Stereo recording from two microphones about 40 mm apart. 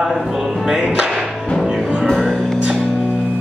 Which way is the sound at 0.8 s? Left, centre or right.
Centre.